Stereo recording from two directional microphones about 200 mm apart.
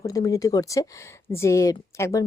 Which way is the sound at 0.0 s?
15° left (ahead or behind).